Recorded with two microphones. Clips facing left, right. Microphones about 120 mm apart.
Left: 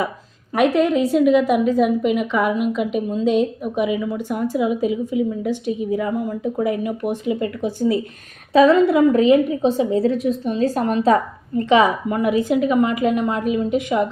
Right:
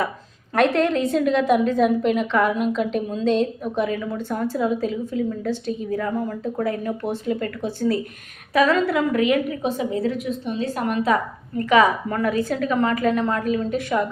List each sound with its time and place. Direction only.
0.5 s a woman's voice: 10° left (ahead or behind)